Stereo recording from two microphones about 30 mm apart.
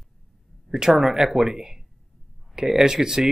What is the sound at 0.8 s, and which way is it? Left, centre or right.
Speech, centre.